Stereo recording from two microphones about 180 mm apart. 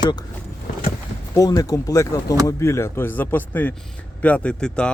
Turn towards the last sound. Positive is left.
turn(degrees=5)  # may be behind; listen again after turning